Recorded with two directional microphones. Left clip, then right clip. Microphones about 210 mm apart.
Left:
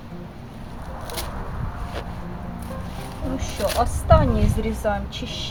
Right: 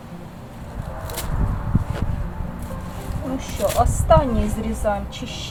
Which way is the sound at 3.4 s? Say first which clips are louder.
Right 2 dB; 5° right (ahead or behind).